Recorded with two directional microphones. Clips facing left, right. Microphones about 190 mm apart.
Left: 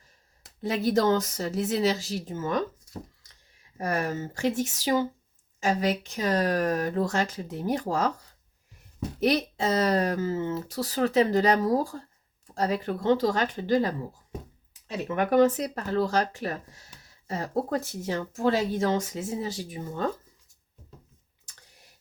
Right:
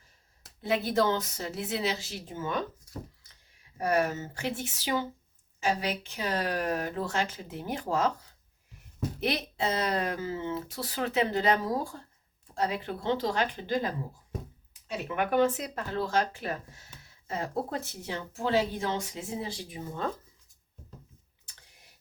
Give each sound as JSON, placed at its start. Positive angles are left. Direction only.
{"t": 0.9, "sound": "speech", "side_deg": 45}
{"t": 3.8, "sound": "speech", "side_deg": 40}
{"t": 9.2, "sound": "speech", "side_deg": 40}
{"t": 15.0, "sound": "speech", "side_deg": 40}